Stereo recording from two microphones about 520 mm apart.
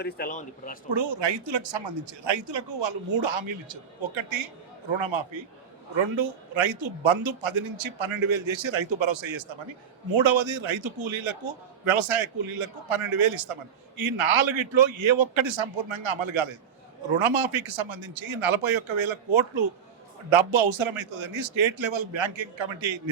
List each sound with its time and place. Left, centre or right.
0.0 s speech: centre
0.9 s a man's voice: right